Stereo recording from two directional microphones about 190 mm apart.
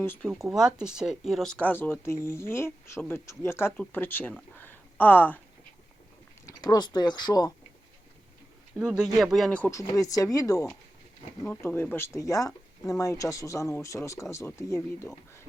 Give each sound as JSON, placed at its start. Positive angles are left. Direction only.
{"t": 0.0, "sound": "speech", "side_deg": 10}
{"t": 0.4, "sound": "speech", "side_deg": 0}
{"t": 6.4, "sound": "speech", "side_deg": 20}
{"t": 8.8, "sound": "speech", "side_deg": -5}